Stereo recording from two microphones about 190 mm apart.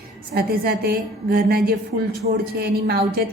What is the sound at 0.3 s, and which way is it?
A woman's voice, 55° right (ahead or behind).